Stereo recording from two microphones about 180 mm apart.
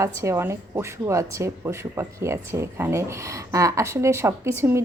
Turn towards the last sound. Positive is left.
turn(degrees=-15)  # may be behind; listen again after turning